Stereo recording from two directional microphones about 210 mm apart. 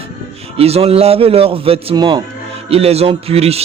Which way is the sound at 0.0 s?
30° right (ahead or behind).